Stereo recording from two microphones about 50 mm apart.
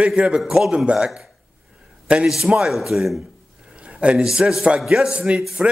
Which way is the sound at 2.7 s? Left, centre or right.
Centre.